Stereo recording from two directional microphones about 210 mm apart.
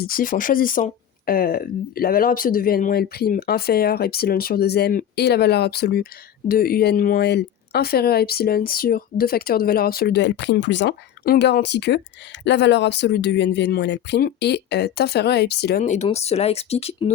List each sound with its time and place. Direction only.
0.0 s speech: 40° left (ahead or behind)
15.8 s speech: 30° left (ahead or behind)